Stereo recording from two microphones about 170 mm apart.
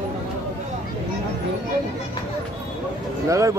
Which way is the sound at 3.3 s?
20° right (ahead or behind).